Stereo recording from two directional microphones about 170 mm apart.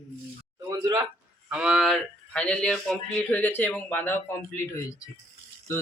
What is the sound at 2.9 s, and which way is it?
Speech, 5° left (ahead or behind).